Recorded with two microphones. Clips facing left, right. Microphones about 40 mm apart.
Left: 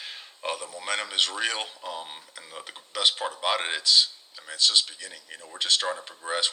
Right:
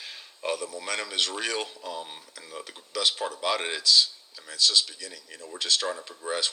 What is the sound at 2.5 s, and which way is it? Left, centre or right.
Speech, left.